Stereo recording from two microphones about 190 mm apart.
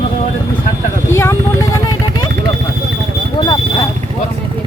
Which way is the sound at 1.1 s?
15° left (ahead or behind).